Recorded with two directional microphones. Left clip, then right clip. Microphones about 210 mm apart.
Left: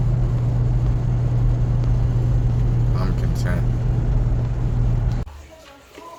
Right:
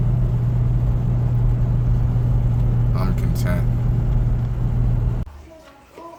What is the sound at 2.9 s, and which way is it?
Vehicle, 20° right (ahead or behind).